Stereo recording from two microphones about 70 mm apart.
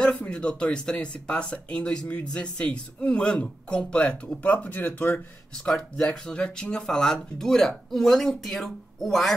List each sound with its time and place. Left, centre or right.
0.0 s speech: centre
5.7 s speech: centre